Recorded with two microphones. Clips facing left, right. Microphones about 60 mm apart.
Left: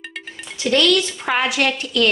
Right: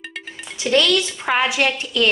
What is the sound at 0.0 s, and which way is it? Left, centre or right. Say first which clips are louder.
Music: even; centre.